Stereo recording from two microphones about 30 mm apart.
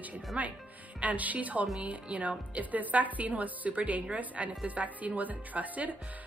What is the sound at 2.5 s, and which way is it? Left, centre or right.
A woman's voice, right.